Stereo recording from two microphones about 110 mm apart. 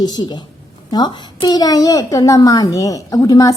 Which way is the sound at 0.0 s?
35° left (ahead or behind).